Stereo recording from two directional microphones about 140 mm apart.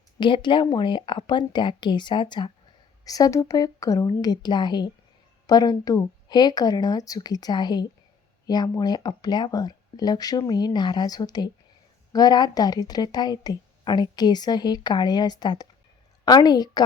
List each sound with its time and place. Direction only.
0.2 s a woman's voice: 35° left (ahead or behind)